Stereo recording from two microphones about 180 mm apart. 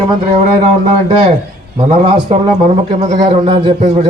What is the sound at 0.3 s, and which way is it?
Speech, 50° right (ahead or behind).